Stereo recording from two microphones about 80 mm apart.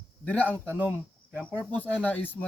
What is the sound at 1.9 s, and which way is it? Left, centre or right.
Speech, left.